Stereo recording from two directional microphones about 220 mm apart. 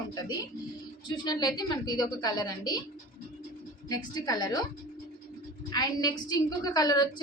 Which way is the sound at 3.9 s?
20° left (ahead or behind).